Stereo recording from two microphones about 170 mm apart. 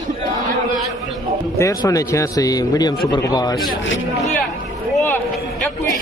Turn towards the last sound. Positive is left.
turn(degrees=15)  # may be behind; listen again after turning